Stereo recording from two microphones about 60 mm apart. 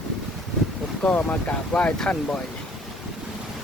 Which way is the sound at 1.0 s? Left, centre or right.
Left.